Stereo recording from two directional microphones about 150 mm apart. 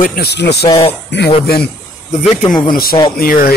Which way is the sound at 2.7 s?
80° left.